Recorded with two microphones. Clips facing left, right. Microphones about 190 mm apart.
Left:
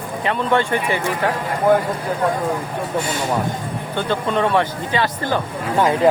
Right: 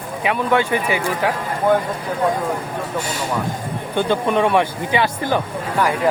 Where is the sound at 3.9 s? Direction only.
15° right (ahead or behind).